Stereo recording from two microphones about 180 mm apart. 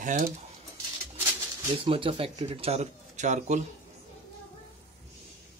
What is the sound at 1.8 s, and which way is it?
Speech, 30° right (ahead or behind).